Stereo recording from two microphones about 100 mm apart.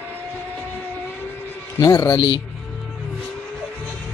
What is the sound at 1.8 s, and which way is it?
Speech, 30° left (ahead or behind).